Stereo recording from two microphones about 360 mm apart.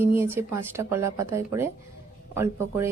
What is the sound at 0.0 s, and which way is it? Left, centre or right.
A woman's voice, centre.